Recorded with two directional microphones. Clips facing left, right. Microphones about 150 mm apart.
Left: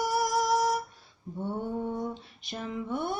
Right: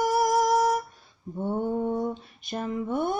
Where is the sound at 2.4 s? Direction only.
50° right (ahead or behind).